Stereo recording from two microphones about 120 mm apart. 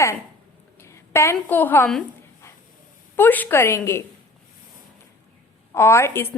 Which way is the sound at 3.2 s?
15° left (ahead or behind).